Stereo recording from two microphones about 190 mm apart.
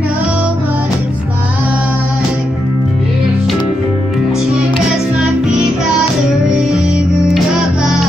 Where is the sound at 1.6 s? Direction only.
5° right (ahead or behind).